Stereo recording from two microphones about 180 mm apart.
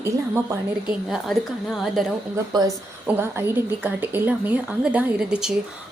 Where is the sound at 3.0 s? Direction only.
10° right (ahead or behind).